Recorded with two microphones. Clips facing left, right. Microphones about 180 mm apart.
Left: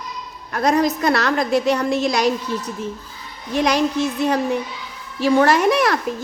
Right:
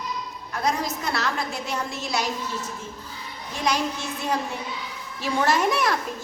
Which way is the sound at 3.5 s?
70° left (ahead or behind).